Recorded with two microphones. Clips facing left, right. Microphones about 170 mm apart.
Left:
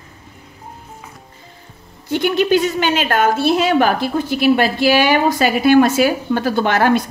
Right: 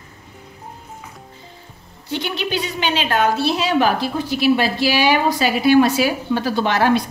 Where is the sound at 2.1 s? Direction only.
50° left (ahead or behind).